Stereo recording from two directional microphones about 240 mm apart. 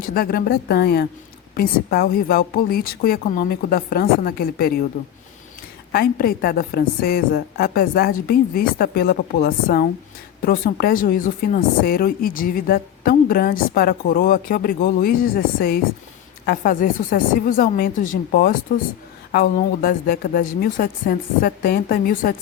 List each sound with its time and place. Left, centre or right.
0.0 s speech: left
5.9 s speech: left